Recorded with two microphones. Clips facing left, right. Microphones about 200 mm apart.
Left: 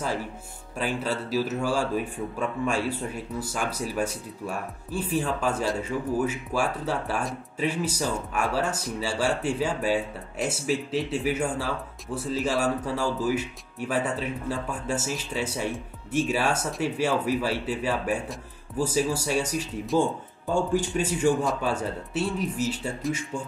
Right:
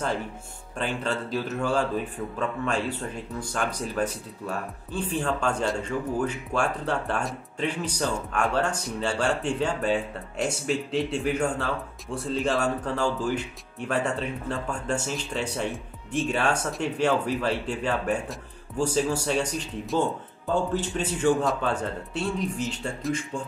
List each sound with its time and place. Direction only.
0.7 s speech: 5° left (ahead or behind)